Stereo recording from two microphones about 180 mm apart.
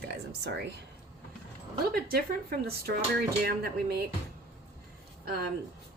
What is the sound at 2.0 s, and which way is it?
Speech, 55° right (ahead or behind).